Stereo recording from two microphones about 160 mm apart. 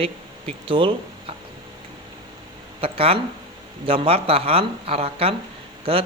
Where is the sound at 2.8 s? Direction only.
35° right (ahead or behind).